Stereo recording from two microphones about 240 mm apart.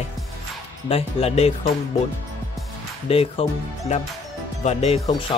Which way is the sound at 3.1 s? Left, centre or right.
Left.